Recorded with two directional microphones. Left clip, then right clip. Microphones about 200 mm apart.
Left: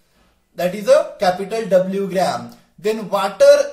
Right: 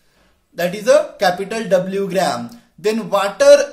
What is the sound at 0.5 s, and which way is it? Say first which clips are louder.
Speech: right 1 dB; 40° right (ahead or behind).